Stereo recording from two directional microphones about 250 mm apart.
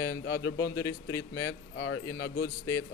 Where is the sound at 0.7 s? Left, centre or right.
Centre.